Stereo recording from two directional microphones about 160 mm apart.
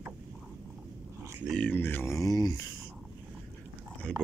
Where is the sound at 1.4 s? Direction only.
5° left (ahead or behind); by 2.6 s 25° left (ahead or behind).